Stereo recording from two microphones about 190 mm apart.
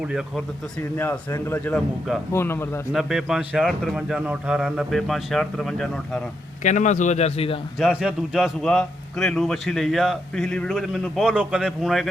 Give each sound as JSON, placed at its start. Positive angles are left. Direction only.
{"t": 0.0, "sound": "a man's voice", "side_deg": 0}
{"t": 0.8, "sound": "a man's voice", "side_deg": 10}
{"t": 2.9, "sound": "a man's voice", "side_deg": 0}
{"t": 6.6, "sound": "a man's voice", "side_deg": 40}
{"t": 7.8, "sound": "a man's voice", "side_deg": -5}